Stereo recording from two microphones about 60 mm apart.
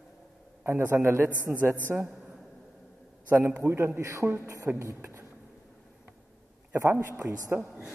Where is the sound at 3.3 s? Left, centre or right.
Right.